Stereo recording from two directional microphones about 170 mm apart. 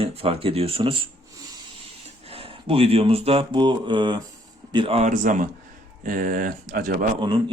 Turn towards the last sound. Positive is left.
turn(degrees=-30)  # may be behind; listen again after turning